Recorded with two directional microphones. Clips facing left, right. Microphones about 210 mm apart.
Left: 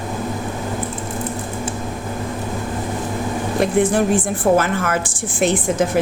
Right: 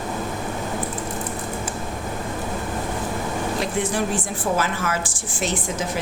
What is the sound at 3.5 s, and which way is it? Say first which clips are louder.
A woman's voice: left 10 dB; 55° left (ahead or behind).